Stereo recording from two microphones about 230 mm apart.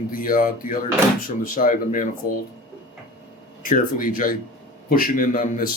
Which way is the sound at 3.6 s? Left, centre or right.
Left.